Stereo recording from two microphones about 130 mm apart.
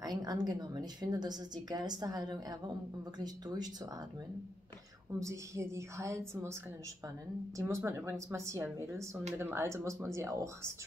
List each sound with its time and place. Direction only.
0.0 s a woman's voice: 30° right (ahead or behind)
5.2 s speech: 20° right (ahead or behind)
7.5 s speech: 25° right (ahead or behind)